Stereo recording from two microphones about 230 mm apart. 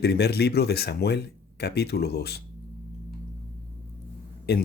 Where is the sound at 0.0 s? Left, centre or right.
Left.